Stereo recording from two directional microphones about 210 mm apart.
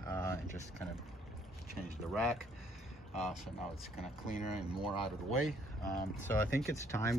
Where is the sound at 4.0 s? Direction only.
40° left (ahead or behind).